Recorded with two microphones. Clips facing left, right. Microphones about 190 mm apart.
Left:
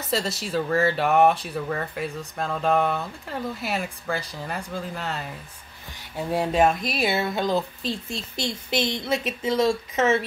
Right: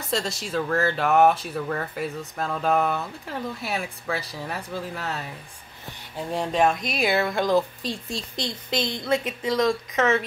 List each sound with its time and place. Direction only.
0.0 s speech: centre (ahead or behind)
8.9 s a woman's voice: 25° left (ahead or behind)
9.6 s speech: 5° left (ahead or behind)